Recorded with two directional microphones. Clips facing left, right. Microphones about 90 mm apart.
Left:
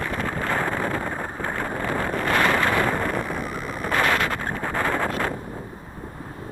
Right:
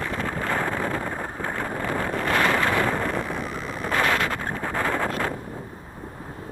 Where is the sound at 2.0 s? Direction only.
55° left (ahead or behind).